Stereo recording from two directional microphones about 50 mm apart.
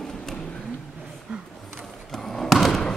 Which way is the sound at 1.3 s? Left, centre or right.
Centre.